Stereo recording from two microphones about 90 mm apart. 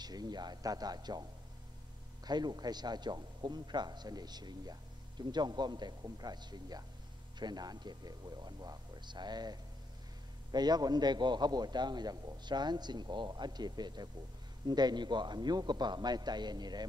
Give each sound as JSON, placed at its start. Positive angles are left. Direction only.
{"t": 0.0, "sound": "a man's voice", "side_deg": -50}
{"t": 2.2, "sound": "a man's voice", "side_deg": -50}